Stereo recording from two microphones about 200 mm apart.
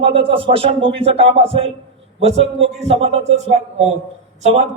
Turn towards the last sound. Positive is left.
turn(degrees=-30)  # may be behind; listen again after turning